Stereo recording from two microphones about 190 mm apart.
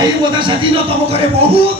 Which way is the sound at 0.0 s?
25° right (ahead or behind).